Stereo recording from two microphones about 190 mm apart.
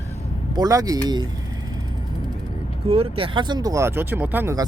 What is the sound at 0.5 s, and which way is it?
Speech, 20° right (ahead or behind).